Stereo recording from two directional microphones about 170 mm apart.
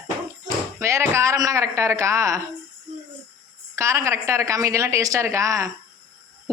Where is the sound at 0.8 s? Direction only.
15° right (ahead or behind).